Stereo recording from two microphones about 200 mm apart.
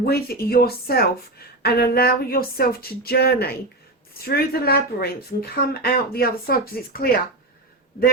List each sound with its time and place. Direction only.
0.0 s speech: 50° left (ahead or behind)